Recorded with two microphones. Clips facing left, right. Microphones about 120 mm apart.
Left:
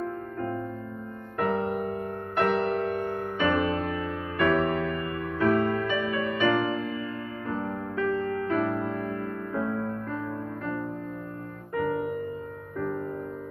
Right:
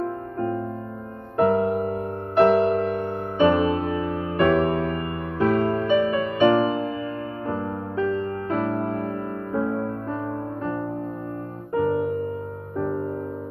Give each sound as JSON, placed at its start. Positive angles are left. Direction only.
{"t": 0.0, "sound": "music", "side_deg": -35}